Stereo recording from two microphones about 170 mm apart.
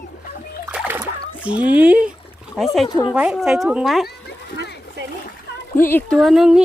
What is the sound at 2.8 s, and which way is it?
Speech, 25° left (ahead or behind).